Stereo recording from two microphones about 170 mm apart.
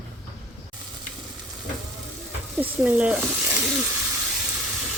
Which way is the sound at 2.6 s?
10° right (ahead or behind).